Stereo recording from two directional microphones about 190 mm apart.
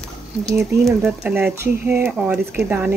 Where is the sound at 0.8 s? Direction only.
Centre (ahead or behind).